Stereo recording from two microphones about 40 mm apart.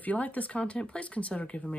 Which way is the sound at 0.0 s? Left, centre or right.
Left.